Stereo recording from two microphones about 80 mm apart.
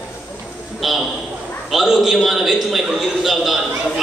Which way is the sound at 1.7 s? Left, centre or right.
Centre.